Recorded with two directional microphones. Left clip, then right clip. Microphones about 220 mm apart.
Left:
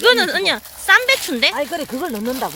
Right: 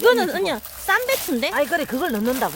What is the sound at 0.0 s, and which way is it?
Speech, 15° right (ahead or behind).